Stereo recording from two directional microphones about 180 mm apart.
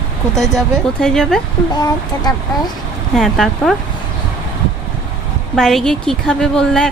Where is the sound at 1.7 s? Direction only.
20° left (ahead or behind).